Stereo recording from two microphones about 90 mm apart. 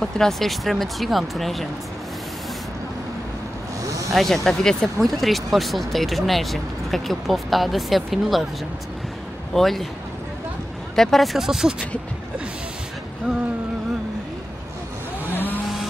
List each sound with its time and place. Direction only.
0.0 s speech: 5° left (ahead or behind)
4.1 s speech: centre (ahead or behind)
9.5 s speech: centre (ahead or behind)
11.0 s speech: 5° left (ahead or behind)
15.3 s vehicle: 20° left (ahead or behind)